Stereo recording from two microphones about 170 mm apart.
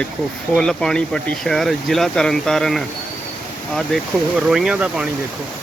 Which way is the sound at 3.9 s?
5° left (ahead or behind).